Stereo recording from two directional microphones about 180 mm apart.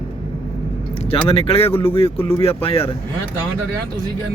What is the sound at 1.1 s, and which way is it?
Speech, 30° left (ahead or behind).